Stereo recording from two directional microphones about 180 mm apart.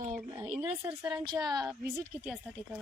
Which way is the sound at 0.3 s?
10° right (ahead or behind).